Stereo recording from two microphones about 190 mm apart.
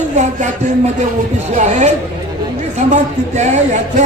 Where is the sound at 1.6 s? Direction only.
40° right (ahead or behind).